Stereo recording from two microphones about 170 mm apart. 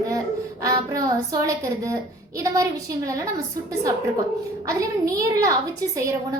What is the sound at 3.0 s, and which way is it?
Speech, 20° right (ahead or behind).